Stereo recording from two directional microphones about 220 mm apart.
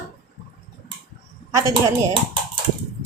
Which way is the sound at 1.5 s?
20° right (ahead or behind).